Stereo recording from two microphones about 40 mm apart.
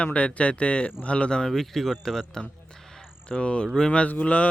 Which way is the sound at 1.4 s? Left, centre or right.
Centre.